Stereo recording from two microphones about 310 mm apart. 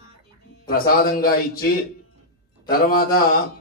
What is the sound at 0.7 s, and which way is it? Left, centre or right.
Speech, left.